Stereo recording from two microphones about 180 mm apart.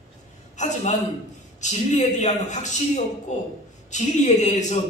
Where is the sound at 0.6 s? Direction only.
40° left (ahead or behind).